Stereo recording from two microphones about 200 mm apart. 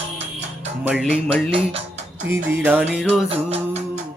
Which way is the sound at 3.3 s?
30° right (ahead or behind).